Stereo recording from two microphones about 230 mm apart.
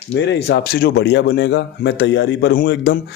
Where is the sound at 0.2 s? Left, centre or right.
Left.